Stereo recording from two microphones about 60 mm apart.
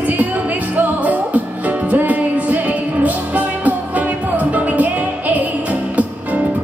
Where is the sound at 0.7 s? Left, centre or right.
Right.